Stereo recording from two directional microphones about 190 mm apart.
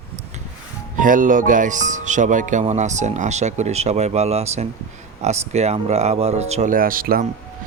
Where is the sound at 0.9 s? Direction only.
45° right (ahead or behind).